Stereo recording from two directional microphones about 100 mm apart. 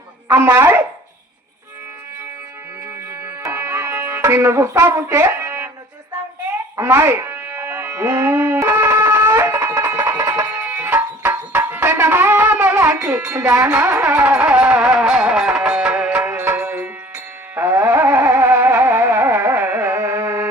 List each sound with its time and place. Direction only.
0.3 s speech: 20° right (ahead or behind)
3.5 s music: 25° right (ahead or behind)
5.1 s a sound: 20° right (ahead or behind)
6.8 s music: 20° right (ahead or behind)
8.6 s shofar: 20° right (ahead or behind)
8.9 s music: 30° right (ahead or behind)
10.5 s music: 15° right (ahead or behind)
13.3 s speech: 30° right (ahead or behind)
14.0 s music: 5° right (ahead or behind)
16.1 s music: 15° right (ahead or behind)